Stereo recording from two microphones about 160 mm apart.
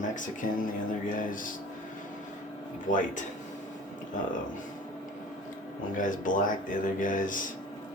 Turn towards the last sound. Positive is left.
turn(degrees=55)  # may be behind; listen again after turning